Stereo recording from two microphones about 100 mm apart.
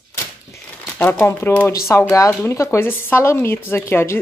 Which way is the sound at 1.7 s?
30° left (ahead or behind).